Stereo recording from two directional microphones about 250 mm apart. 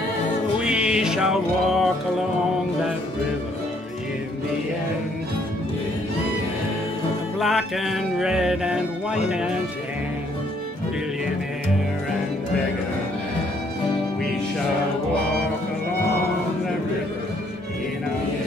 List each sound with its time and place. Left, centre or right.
0.7 s music: centre
7.3 s music: centre